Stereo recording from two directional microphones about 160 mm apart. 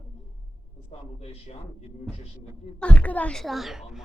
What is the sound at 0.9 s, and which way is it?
Speech, 40° left (ahead or behind).